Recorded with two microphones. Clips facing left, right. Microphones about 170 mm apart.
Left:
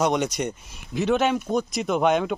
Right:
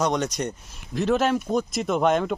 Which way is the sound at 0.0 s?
Centre (ahead or behind).